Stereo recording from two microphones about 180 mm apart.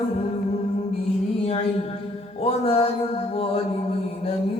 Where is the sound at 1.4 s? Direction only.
35° left (ahead or behind).